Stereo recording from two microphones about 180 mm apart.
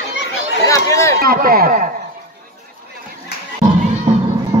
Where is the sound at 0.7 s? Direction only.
15° left (ahead or behind).